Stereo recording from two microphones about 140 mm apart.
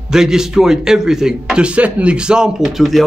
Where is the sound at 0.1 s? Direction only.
5° right (ahead or behind).